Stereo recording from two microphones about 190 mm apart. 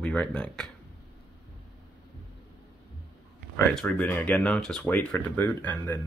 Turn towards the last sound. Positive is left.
turn(degrees=10)  # may be behind; listen again after turning